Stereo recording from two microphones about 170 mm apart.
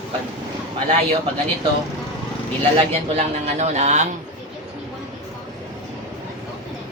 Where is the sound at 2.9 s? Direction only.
40° right (ahead or behind).